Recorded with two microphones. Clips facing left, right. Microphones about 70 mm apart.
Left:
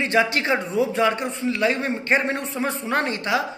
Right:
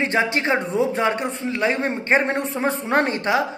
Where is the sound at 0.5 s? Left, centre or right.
Right.